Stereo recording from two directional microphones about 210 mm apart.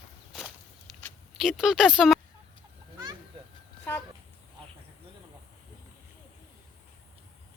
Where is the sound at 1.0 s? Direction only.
Centre (ahead or behind).